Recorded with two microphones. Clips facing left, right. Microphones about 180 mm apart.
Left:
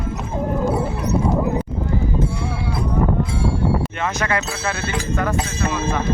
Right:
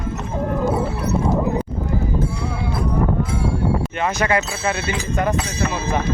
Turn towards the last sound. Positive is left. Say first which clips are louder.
# right 1 dB
turn(degrees=-15)  # may be behind; listen again after turning